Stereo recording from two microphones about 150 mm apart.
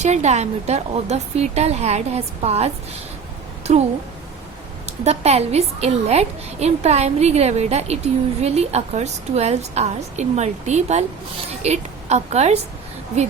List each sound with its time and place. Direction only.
0.0 s a woman's voice: 50° right (ahead or behind)
4.9 s a woman's voice: 45° right (ahead or behind)